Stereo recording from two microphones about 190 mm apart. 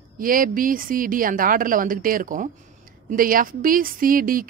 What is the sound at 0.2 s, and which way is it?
A woman's voice, 45° right (ahead or behind).